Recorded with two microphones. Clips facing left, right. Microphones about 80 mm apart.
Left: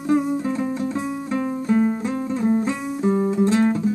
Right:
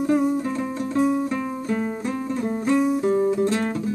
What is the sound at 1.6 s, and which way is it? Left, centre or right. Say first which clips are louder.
Music: left 5 dB; centre.